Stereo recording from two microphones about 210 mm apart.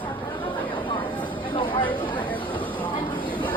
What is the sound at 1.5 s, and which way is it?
Chatter, 25° left (ahead or behind).